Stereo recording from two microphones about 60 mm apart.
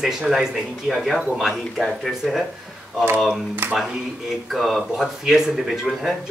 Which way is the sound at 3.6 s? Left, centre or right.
Right.